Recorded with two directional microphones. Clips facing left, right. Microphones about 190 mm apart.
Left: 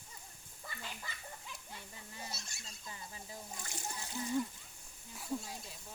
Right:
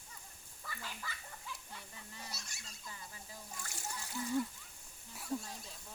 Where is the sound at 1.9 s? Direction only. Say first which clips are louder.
Left 4 dB; 25° left (ahead or behind).